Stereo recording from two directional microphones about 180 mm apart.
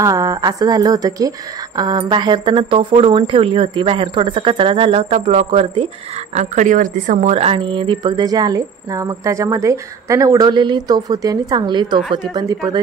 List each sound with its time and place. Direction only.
0.0 s a woman's voice: 20° right (ahead or behind)
6.3 s a woman's voice: 45° right (ahead or behind); by 12.8 s 25° right (ahead or behind)